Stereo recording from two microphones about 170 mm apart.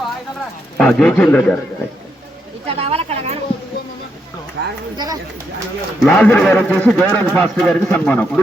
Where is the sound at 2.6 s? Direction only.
35° right (ahead or behind).